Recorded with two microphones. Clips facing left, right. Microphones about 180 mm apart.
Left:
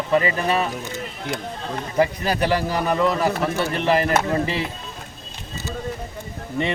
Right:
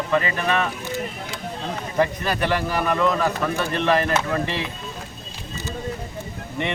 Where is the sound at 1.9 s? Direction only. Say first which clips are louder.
Left 2 dB; 10° left (ahead or behind).